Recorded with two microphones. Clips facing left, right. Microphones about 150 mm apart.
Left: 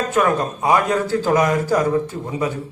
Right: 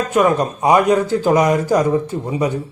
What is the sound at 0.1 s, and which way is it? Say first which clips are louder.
A man's voice: right 5 dB; 20° right (ahead or behind).